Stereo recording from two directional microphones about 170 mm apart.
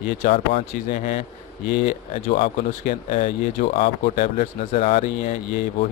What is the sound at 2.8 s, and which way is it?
Speech, 40° left (ahead or behind).